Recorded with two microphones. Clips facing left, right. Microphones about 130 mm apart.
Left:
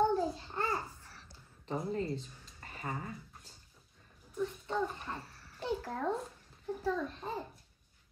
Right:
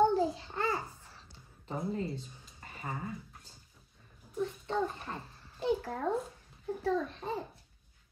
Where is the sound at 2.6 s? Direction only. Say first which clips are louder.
Even; 10° right (ahead or behind).